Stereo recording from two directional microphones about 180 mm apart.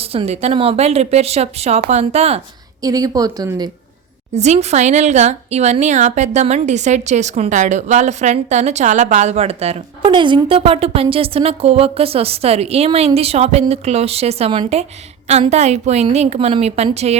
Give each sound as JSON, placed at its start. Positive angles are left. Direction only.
{"t": 0.0, "sound": "a woman's voice", "side_deg": -35}
{"t": 2.8, "sound": "speech", "side_deg": -20}
{"t": 4.4, "sound": "a woman's voice", "side_deg": -35}